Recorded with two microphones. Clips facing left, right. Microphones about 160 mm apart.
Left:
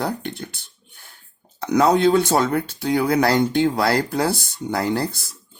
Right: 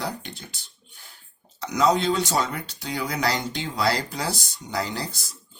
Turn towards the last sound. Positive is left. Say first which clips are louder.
# left 9 dB
turn(degrees=55)  # may be behind; listen again after turning